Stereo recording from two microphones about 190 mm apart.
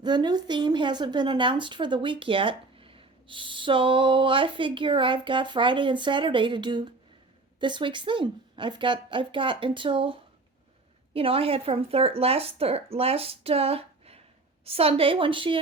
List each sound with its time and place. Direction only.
0.0 s speech: 20° right (ahead or behind)